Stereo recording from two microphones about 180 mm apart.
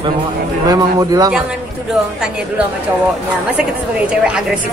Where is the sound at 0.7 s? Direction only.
20° right (ahead or behind).